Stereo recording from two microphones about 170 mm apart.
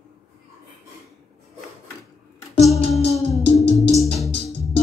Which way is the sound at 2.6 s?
Centre (ahead or behind).